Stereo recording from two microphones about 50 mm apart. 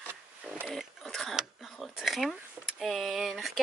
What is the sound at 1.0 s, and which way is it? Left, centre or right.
Speech, centre.